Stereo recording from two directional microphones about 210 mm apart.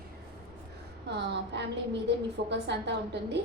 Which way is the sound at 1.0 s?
55° right (ahead or behind).